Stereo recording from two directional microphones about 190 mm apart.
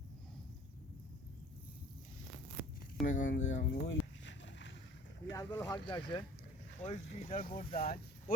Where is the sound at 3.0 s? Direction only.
40° left (ahead or behind).